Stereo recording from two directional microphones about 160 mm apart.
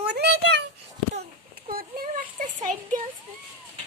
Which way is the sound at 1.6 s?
65° right (ahead or behind).